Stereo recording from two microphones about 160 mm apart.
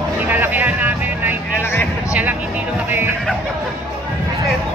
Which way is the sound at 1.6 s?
15° left (ahead or behind).